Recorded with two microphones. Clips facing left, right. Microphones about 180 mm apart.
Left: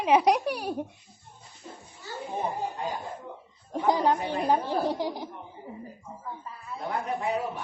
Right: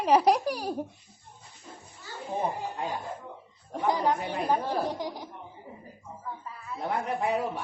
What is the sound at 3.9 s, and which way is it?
Speech, 25° left (ahead or behind).